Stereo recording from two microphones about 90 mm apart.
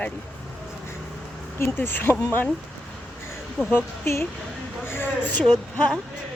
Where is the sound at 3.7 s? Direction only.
25° left (ahead or behind).